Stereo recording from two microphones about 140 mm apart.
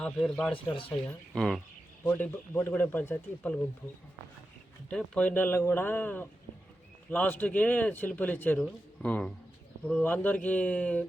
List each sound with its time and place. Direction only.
0.0 s speech: 5° left (ahead or behind)
0.5 s speech: 40° left (ahead or behind)
1.3 s speech: centre (ahead or behind)
2.0 s speech: 15° left (ahead or behind)
4.9 s speech: 5° left (ahead or behind)